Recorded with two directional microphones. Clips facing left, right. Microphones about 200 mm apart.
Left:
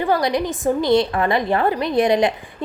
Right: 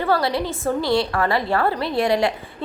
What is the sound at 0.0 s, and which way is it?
A woman's voice, 15° left (ahead or behind).